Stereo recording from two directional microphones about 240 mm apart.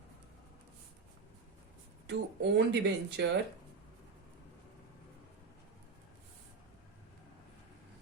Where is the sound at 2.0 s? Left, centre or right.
Right.